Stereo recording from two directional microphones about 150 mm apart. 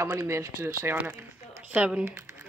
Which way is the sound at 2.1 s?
20° right (ahead or behind).